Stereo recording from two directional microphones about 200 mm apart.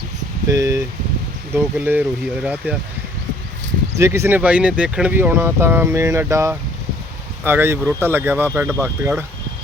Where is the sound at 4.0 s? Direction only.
15° right (ahead or behind).